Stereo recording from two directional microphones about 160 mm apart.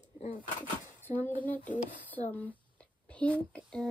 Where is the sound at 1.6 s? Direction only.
55° left (ahead or behind).